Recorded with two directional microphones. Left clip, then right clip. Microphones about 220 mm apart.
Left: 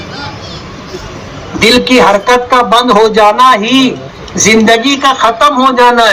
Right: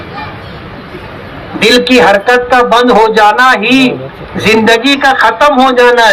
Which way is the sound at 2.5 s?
30° right (ahead or behind).